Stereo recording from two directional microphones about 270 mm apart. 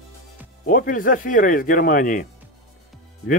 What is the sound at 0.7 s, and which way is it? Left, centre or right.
Speech, left.